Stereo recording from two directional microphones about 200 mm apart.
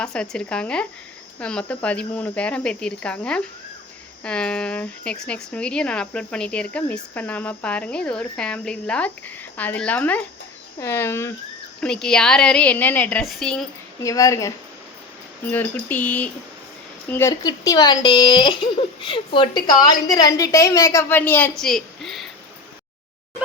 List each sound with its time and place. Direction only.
0.0 s speech: 5° left (ahead or behind)
14.0 s speech: 15° left (ahead or behind)